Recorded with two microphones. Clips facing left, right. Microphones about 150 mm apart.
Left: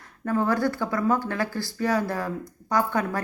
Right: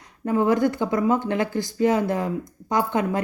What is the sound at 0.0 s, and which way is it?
A woman's voice, 20° right (ahead or behind).